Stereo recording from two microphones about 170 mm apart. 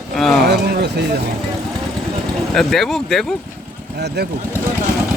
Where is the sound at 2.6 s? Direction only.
Centre (ahead or behind).